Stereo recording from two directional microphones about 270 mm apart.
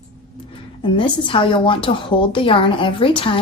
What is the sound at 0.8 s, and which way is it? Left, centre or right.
A woman's voice, centre.